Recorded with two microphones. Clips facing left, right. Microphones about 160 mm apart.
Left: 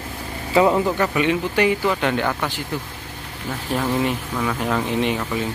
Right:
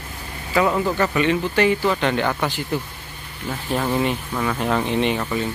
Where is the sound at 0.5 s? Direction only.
20° left (ahead or behind).